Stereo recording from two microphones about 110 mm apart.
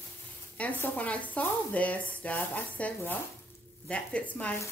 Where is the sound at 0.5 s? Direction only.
15° left (ahead or behind).